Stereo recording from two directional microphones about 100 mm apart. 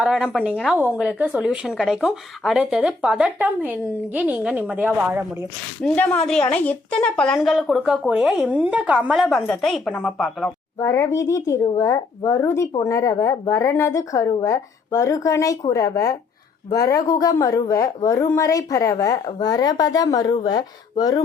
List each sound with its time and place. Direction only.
0.0 s speech: 10° right (ahead or behind)
5.8 s speech: 10° left (ahead or behind)
7.3 s speech: centre (ahead or behind)
9.6 s speech: 5° left (ahead or behind)
10.8 s a woman's voice: 30° left (ahead or behind)